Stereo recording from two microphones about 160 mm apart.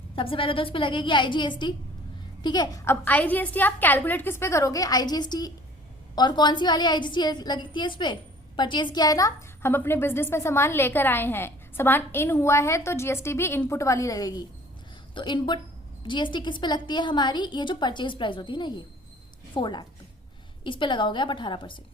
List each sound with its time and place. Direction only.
0.2 s a woman's voice: 35° left (ahead or behind)